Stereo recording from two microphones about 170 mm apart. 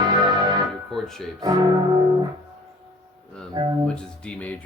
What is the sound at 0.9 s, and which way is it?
Music, centre (ahead or behind).